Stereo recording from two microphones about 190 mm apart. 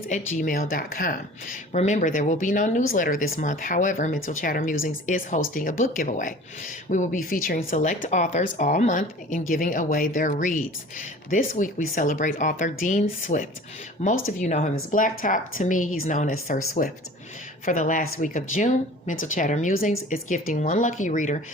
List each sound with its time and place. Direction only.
0.1 s speech: 40° left (ahead or behind)